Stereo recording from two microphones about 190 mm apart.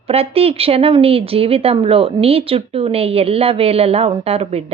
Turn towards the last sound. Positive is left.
turn(degrees=-30)  # may be behind; listen again after turning